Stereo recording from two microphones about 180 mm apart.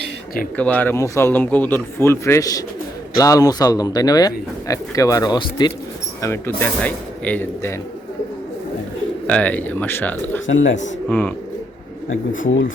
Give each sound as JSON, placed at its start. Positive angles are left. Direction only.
{"t": 0.5, "sound": "a man's voice", "side_deg": 10}
{"t": 6.2, "sound": "a man's voice", "side_deg": 15}
{"t": 9.2, "sound": "a man's voice", "side_deg": 10}
{"t": 10.4, "sound": "speech", "side_deg": 90}